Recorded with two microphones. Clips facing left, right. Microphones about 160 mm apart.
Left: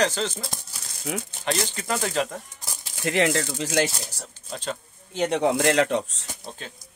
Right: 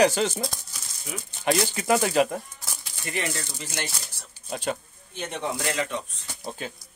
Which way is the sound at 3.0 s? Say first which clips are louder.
Left 9 dB; 90° left.